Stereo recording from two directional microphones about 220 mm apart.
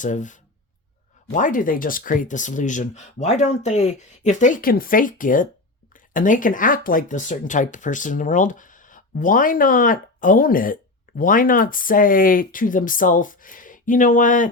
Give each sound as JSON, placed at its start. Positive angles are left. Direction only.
{"t": 0.0, "sound": "speech", "side_deg": 35}